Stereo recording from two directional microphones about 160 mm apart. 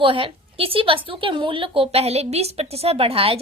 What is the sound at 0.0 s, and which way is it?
A woman's voice, 35° right (ahead or behind).